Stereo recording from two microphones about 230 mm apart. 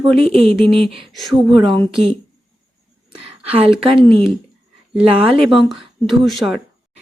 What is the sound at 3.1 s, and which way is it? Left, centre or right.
Speech, centre.